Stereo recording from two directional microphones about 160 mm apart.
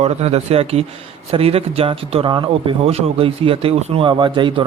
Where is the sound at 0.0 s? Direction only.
40° right (ahead or behind).